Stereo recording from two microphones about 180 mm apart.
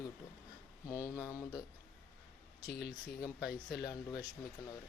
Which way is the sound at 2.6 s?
65° left (ahead or behind).